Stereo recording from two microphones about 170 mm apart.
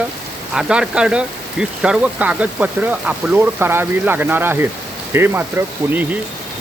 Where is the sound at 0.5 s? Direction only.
5° right (ahead or behind).